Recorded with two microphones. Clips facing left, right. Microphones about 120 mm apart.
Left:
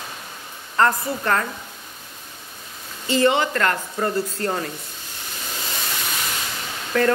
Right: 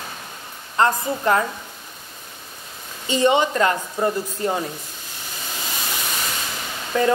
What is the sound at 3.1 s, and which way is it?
Speech, 20° right (ahead or behind).